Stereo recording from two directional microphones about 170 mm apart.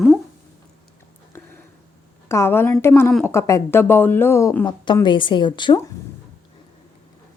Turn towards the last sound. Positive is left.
turn(degrees=25)  # may be behind; listen again after turning